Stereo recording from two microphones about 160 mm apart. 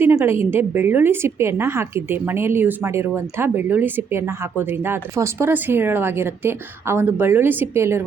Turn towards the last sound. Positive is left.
turn(degrees=-15)  # may be behind; listen again after turning